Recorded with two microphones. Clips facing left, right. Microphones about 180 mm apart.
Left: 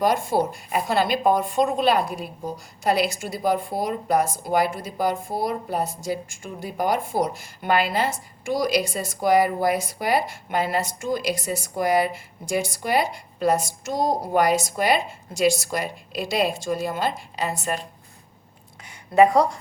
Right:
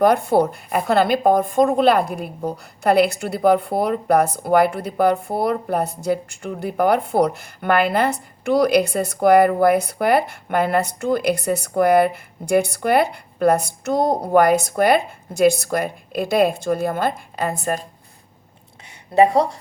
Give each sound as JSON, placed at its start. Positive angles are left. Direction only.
{"t": 0.0, "sound": "a woman's voice", "side_deg": -60}
{"t": 19.1, "sound": "speech", "side_deg": -35}